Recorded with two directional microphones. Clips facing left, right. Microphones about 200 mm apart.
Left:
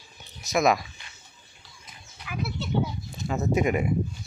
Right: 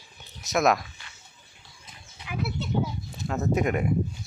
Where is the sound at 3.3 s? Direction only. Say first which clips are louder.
Left 1 dB; centre (ahead or behind).